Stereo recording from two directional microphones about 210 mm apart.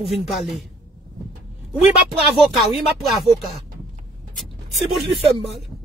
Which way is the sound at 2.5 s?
Centre (ahead or behind).